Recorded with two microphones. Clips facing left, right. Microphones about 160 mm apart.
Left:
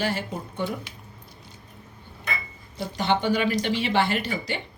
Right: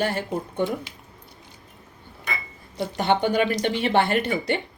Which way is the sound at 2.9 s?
45° right (ahead or behind).